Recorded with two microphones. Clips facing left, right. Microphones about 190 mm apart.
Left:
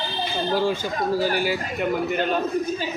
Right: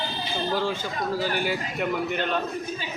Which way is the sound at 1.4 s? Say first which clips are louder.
Left 3 dB; 5° left (ahead or behind).